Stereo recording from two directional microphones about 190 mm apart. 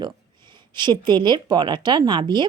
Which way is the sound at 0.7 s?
25° right (ahead or behind).